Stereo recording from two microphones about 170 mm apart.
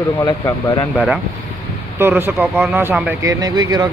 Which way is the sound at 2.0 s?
10° right (ahead or behind).